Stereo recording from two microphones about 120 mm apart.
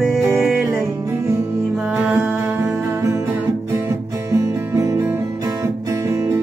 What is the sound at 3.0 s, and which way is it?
Music, 25° right (ahead or behind).